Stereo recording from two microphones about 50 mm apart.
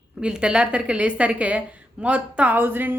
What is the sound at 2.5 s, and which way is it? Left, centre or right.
Speech, right.